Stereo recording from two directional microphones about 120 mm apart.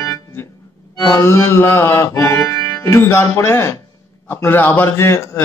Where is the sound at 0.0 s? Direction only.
25° left (ahead or behind).